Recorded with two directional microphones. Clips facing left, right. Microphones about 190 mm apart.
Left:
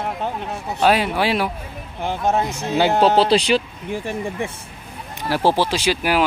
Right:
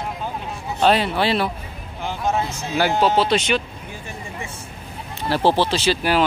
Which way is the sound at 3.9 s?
80° left.